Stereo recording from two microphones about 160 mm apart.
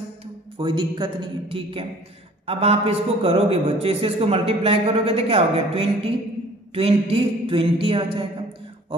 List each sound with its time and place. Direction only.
0.6 s a man's voice: 30° right (ahead or behind)